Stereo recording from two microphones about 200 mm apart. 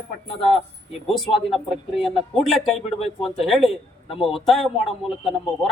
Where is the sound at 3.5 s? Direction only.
Centre (ahead or behind).